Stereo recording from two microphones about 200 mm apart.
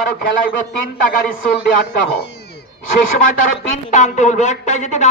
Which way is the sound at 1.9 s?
55° left (ahead or behind).